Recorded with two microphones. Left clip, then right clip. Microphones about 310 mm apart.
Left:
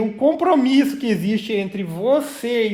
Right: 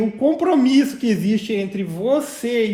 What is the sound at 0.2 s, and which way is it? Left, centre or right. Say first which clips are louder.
A woman's voice: left 1 dB; left.